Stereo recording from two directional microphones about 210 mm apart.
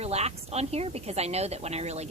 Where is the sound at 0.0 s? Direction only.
30° right (ahead or behind).